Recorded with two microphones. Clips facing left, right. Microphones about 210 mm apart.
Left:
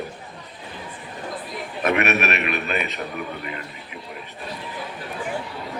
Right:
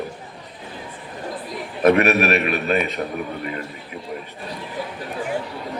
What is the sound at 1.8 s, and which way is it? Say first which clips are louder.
A man's voice: right 6 dB; 35° right (ahead or behind).